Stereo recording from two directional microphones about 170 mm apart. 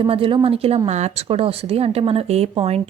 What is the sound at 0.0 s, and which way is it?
Speech, 30° right (ahead or behind).